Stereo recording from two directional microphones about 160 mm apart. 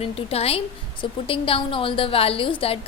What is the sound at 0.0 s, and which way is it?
A woman's voice, 40° left (ahead or behind).